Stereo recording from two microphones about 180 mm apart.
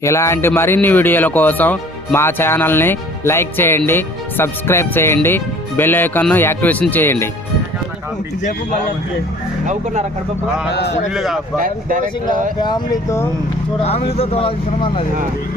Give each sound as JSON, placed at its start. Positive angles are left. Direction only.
{"t": 0.0, "sound": "speech", "side_deg": 15}
{"t": 9.6, "sound": "speech", "side_deg": -40}
{"t": 10.7, "sound": "a man's voice", "side_deg": 70}
{"t": 11.1, "sound": "speech", "side_deg": 0}
{"t": 11.6, "sound": "speech", "side_deg": -45}
{"t": 12.5, "sound": "speech", "side_deg": 25}
{"t": 14.2, "sound": "speech", "side_deg": 30}